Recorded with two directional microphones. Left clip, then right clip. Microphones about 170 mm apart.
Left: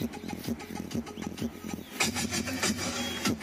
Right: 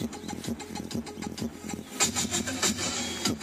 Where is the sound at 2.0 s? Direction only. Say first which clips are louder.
Right 2 dB; 20° right (ahead or behind).